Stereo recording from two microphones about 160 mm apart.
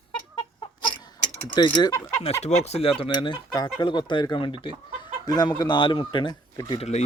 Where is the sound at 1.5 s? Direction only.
30° left (ahead or behind).